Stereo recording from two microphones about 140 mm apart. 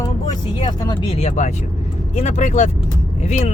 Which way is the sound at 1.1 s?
50° left (ahead or behind).